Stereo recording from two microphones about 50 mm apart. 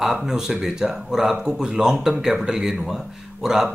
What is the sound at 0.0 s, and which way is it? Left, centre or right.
Speech, centre.